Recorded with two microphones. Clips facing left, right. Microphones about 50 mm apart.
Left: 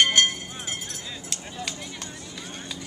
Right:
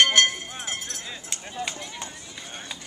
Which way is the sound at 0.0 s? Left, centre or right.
Right.